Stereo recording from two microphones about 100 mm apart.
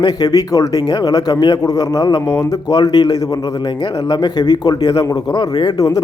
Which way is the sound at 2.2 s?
30° left (ahead or behind).